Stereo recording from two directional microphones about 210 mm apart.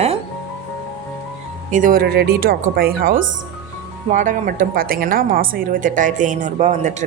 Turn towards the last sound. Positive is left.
turn(degrees=-35)  # may be behind; listen again after turning